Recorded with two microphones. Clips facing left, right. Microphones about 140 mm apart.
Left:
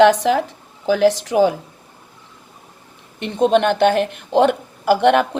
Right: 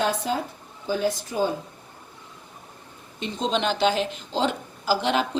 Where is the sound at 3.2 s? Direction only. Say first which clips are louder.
Left 10 dB; 60° left (ahead or behind).